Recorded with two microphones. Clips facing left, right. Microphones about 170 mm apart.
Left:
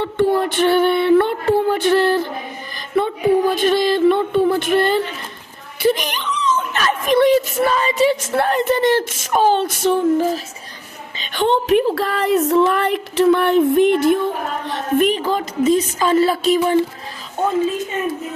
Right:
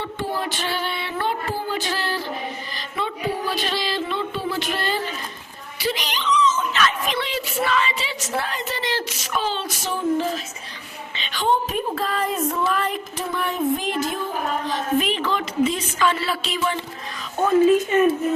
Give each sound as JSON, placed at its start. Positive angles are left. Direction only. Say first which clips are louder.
{"t": 0.0, "sound": "music", "louder": "left 10 dB", "side_deg": 60}
{"t": 2.9, "sound": "speech", "louder": "left 11 dB", "side_deg": 55}
{"t": 11.3, "sound": "speech", "louder": "left 7 dB", "side_deg": 70}
{"t": 14.7, "sound": "speech", "louder": "left 7 dB", "side_deg": 50}
{"t": 15.2, "sound": "speech", "louder": "left 3 dB", "side_deg": 40}